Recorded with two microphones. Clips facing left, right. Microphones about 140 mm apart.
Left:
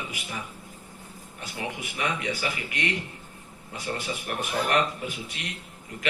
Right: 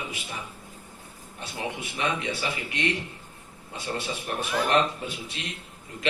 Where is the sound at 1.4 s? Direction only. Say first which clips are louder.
Right 1 dB; 25° right (ahead or behind).